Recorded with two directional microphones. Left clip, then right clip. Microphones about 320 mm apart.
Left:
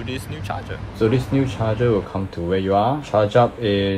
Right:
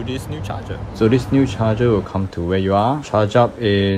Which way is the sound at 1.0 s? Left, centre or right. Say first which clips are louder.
Right 3 dB; right.